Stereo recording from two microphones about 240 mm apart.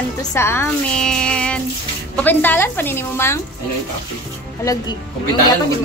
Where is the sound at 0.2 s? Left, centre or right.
Centre.